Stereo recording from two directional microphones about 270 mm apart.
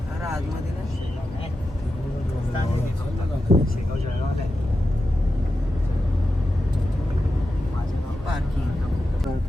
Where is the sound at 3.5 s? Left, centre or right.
Right.